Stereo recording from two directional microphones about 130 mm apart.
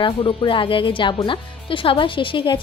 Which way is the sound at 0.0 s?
40° left (ahead or behind).